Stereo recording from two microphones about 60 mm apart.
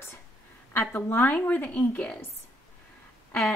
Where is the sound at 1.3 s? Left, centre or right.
Left.